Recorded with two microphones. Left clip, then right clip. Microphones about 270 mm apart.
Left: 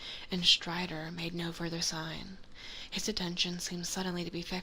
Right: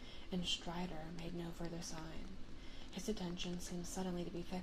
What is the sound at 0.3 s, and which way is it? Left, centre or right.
Speech, left.